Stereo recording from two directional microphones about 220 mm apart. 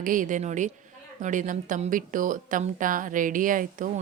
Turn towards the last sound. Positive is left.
turn(degrees=-35)  # may be behind; listen again after turning